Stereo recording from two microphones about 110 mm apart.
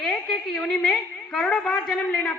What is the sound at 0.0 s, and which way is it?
A woman's voice, 5° left (ahead or behind).